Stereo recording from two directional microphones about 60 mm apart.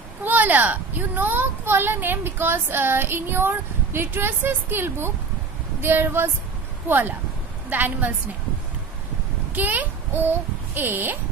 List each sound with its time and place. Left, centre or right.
0.2 s a child's voice: right
9.5 s a child's voice: right